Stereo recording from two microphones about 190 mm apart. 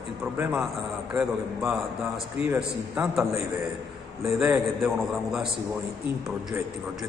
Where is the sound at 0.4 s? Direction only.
10° right (ahead or behind).